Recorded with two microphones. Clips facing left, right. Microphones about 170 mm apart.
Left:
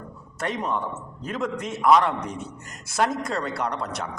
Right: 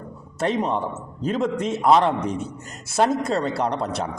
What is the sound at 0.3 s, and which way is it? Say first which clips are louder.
A man's voice: right 5 dB; 25° right (ahead or behind).